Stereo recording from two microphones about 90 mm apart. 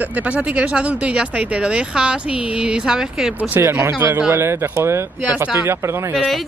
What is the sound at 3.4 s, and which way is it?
Speech, 20° right (ahead or behind).